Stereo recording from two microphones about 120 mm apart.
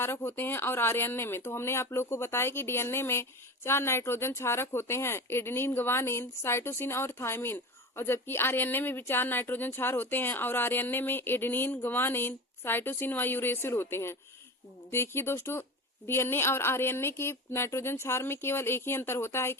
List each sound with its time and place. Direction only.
0.0 s speech: 20° left (ahead or behind)